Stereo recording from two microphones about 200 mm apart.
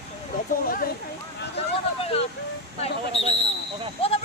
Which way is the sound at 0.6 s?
45° left (ahead or behind).